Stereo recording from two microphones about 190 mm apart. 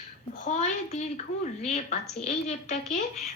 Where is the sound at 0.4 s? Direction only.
40° left (ahead or behind).